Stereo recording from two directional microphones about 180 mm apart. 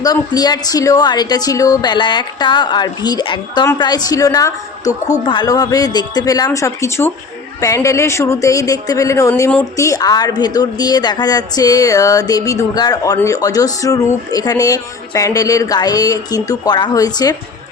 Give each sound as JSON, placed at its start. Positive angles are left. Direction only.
{"t": 0.0, "sound": "a woman's voice", "side_deg": 20}